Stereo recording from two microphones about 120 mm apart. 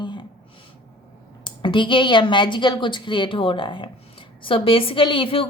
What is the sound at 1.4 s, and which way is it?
A woman's voice, 45° left (ahead or behind).